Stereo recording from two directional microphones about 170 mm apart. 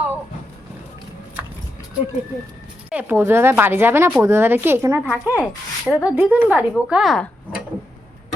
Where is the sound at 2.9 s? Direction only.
10° right (ahead or behind).